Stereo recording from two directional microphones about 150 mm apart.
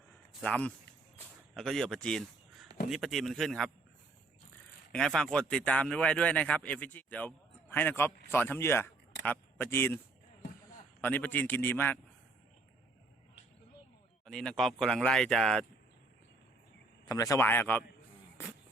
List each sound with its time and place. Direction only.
0.4 s speech: 10° left (ahead or behind)
4.9 s speech: 5° left (ahead or behind)
11.0 s speech: 15° left (ahead or behind)
14.3 s speech: 5° left (ahead or behind)
17.1 s speech: 20° left (ahead or behind)